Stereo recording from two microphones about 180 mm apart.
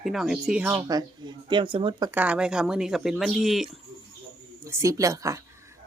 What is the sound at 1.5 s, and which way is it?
Speech, 25° right (ahead or behind).